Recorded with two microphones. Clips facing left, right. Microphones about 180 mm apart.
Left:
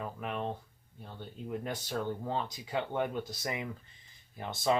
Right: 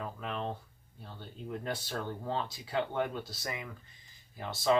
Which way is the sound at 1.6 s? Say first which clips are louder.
Left 1 dB; 15° left (ahead or behind).